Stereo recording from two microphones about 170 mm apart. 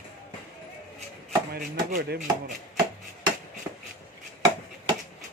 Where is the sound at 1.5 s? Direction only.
65° right (ahead or behind).